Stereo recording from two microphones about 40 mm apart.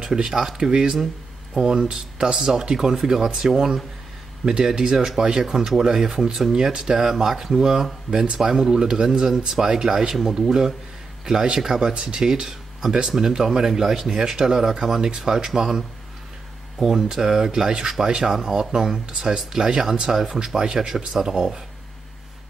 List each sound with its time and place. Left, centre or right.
0.0 s speech: centre
16.8 s speech: centre
20.4 s speech: centre